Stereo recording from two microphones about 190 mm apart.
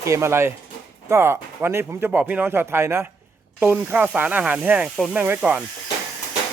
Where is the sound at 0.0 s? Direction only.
15° right (ahead or behind).